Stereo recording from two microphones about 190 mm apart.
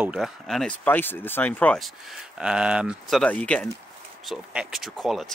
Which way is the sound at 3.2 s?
5° left (ahead or behind).